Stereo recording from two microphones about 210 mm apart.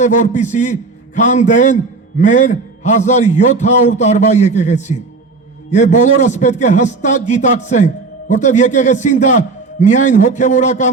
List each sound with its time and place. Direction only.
0.0 s a man's voice: 35° left (ahead or behind)